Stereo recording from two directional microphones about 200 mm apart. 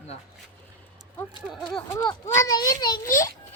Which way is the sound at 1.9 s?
15° left (ahead or behind).